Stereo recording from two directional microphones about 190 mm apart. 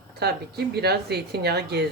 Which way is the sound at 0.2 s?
60° right (ahead or behind).